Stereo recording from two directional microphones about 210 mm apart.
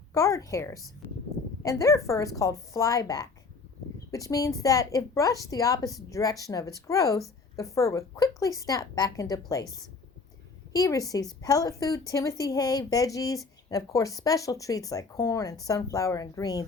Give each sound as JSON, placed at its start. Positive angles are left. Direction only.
{"t": 0.1, "sound": "a woman's voice", "side_deg": 15}
{"t": 10.7, "sound": "a woman's voice", "side_deg": 15}